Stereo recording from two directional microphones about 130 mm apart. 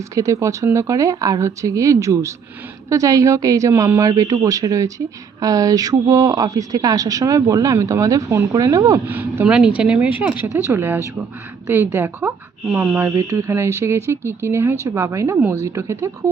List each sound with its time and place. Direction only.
0.1 s speech: 25° right (ahead or behind)
9.0 s speech: 15° right (ahead or behind)